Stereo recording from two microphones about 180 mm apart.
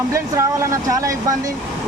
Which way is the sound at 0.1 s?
15° right (ahead or behind).